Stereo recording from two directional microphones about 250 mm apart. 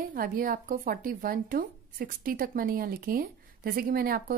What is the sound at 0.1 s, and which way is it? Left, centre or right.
A woman's voice, right.